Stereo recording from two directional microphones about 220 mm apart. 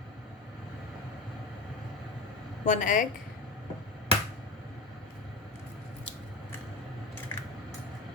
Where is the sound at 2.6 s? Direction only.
35° left (ahead or behind).